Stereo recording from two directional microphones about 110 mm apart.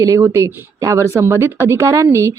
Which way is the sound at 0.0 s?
30° right (ahead or behind).